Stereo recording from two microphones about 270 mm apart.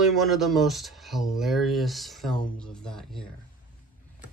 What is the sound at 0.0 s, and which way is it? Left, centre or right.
Speech, centre.